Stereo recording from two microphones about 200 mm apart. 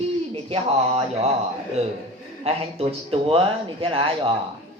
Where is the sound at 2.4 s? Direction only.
30° right (ahead or behind).